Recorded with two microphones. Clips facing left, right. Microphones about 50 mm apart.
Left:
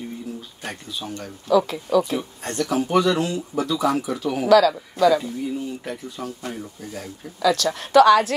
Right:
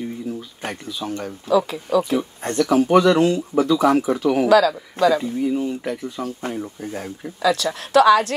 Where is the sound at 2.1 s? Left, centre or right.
Right.